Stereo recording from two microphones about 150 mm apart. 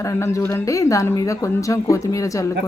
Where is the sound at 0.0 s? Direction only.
20° left (ahead or behind).